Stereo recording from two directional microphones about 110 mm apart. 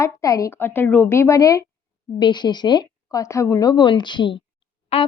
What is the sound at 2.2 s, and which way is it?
A woman's voice, 45° left (ahead or behind).